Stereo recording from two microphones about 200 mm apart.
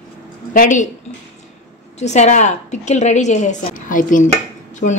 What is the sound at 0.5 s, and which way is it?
Speech, 40° left (ahead or behind).